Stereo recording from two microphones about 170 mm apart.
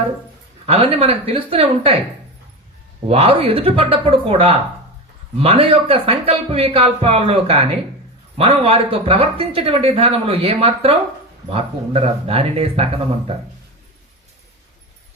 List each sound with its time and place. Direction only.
0.6 s speech: 35° right (ahead or behind)
3.1 s speech: 35° right (ahead or behind)